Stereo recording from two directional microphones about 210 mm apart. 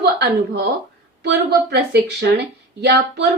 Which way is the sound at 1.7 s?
55° right (ahead or behind).